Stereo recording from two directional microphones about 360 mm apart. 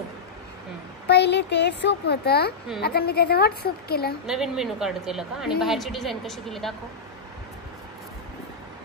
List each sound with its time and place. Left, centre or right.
1.0 s speech: left
4.3 s speech: centre